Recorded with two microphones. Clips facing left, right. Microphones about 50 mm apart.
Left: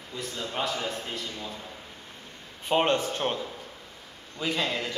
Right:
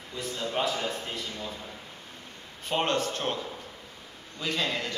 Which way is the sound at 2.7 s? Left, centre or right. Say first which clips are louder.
Left 3 dB; centre.